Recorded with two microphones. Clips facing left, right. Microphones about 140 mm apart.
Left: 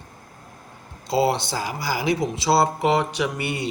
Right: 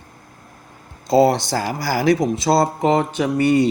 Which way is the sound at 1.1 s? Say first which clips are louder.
Right 6 dB; 50° right (ahead or behind).